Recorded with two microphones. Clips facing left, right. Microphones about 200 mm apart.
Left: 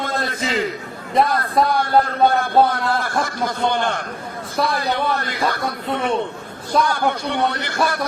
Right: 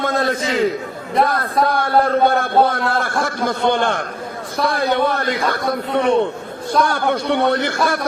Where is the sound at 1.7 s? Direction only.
55° right (ahead or behind).